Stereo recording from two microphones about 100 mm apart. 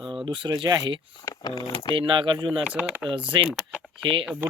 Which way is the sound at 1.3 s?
45° left (ahead or behind).